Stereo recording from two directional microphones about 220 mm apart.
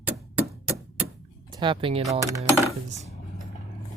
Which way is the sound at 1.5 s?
20° right (ahead or behind).